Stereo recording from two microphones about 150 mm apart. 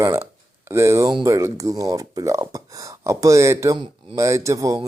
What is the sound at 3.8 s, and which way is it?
Speech, 30° right (ahead or behind).